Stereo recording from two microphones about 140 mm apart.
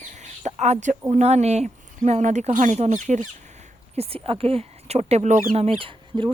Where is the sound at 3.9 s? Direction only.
45° right (ahead or behind).